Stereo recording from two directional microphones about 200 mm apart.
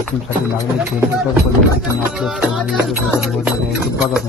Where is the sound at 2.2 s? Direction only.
Centre (ahead or behind).